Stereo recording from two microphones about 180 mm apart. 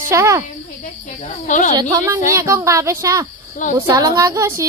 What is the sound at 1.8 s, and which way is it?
Speech, 20° right (ahead or behind).